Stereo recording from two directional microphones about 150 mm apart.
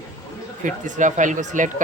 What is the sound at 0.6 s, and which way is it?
Speech, 55° right (ahead or behind).